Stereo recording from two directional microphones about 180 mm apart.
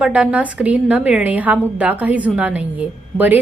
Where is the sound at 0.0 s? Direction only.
5° right (ahead or behind).